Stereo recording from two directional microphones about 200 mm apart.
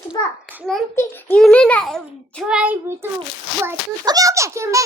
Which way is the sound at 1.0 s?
10° left (ahead or behind).